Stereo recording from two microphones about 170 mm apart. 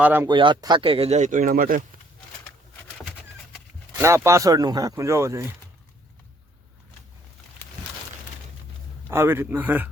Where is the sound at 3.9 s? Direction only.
15° right (ahead or behind).